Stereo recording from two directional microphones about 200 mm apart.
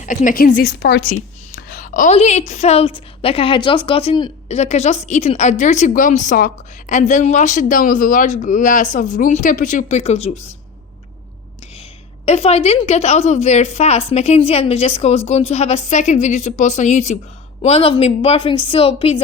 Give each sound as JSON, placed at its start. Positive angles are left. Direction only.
{"t": 0.0, "sound": "a woman's voice", "side_deg": 40}
{"t": 1.1, "sound": "a woman's voice", "side_deg": 40}
{"t": 12.2, "sound": "a woman's voice", "side_deg": 30}